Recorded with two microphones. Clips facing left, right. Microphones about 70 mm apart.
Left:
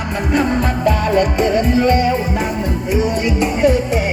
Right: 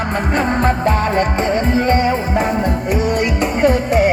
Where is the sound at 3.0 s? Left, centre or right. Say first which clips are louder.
Left 1 dB; right.